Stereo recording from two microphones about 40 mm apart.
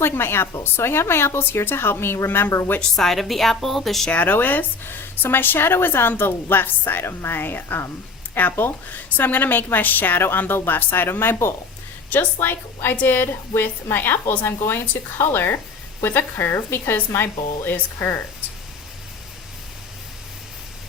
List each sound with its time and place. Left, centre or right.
0.0 s a woman's voice: left
2.9 s a woman's voice: centre
4.1 s a woman's voice: left
12.1 s a woman's voice: left